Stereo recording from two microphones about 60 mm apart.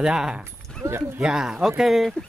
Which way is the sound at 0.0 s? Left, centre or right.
Centre.